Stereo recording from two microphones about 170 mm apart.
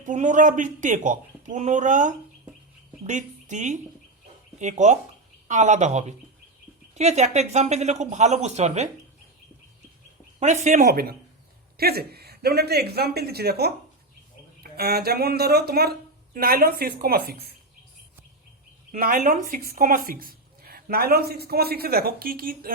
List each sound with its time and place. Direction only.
0.0 s a man's voice: 45° right (ahead or behind)
10.4 s a man's voice: 45° right (ahead or behind)
10.8 s a woman's voice: 65° right (ahead or behind)
18.9 s a woman's voice: 55° right (ahead or behind)